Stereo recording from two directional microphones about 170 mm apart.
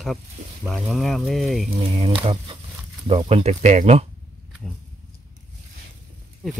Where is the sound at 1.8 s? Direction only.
35° right (ahead or behind).